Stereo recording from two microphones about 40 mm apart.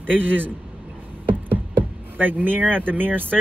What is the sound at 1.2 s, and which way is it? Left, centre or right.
Knock, right.